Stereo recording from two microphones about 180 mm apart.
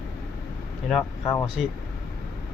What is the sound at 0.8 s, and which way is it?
Speech, centre (ahead or behind).